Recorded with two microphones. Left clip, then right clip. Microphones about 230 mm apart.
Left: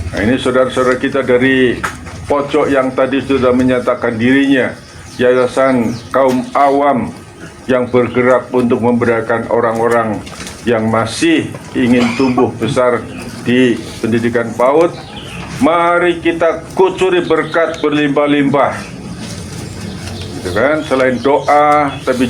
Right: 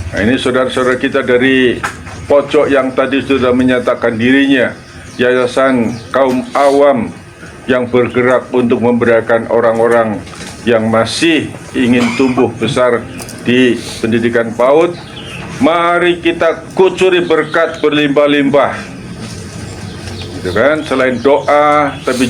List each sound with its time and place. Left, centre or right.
0.2 s a man's voice: right
20.5 s a man's voice: right